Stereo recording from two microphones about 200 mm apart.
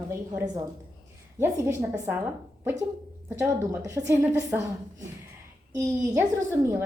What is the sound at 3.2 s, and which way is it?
A woman's voice, 15° right (ahead or behind).